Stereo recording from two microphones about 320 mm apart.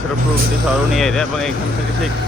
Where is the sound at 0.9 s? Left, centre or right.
Centre.